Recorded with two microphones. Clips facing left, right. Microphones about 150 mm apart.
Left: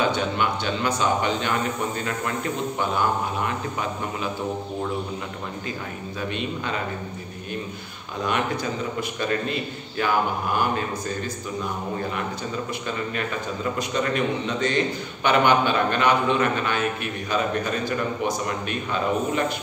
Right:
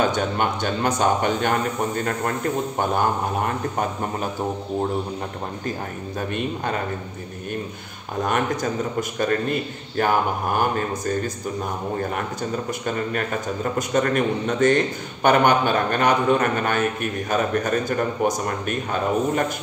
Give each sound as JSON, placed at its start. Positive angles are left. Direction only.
{"t": 0.0, "sound": "a man's voice", "side_deg": -45}
{"t": 2.8, "sound": "a man's voice", "side_deg": -50}
{"t": 6.3, "sound": "a man's voice", "side_deg": -50}
{"t": 8.2, "sound": "a man's voice", "side_deg": -45}
{"t": 12.8, "sound": "a man's voice", "side_deg": -45}